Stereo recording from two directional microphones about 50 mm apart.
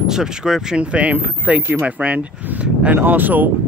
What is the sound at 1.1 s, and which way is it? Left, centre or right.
Speech, right.